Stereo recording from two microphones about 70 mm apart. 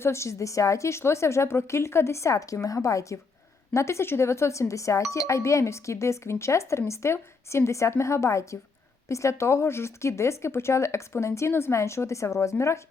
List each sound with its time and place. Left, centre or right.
0.0 s speech: left